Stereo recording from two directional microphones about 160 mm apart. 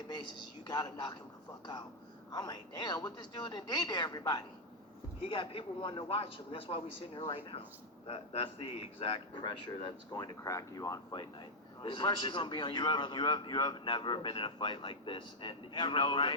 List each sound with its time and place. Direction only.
0.7 s speech: 25° left (ahead or behind)
2.3 s a man's voice: 25° left (ahead or behind)
10.2 s a man's voice: 20° left (ahead or behind)